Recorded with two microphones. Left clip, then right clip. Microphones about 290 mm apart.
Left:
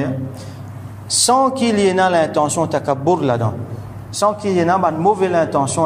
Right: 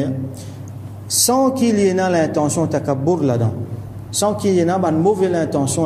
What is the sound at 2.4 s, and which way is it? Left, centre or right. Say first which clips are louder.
Speech: left 2 dB; left.